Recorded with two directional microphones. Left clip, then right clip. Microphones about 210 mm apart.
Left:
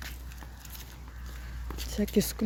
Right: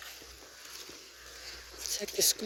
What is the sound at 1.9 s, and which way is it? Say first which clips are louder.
Speech: left 1 dB; 10° left (ahead or behind).